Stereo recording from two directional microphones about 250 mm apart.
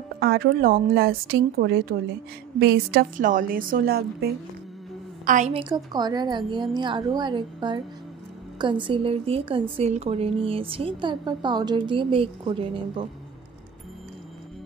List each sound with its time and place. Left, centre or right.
0.2 s a woman's voice: right